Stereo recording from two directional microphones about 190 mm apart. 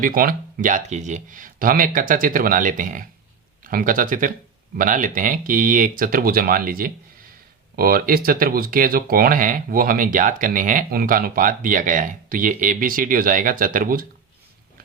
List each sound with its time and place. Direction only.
0.0 s speech: 50° right (ahead or behind)